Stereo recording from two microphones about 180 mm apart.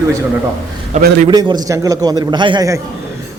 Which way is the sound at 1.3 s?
25° right (ahead or behind).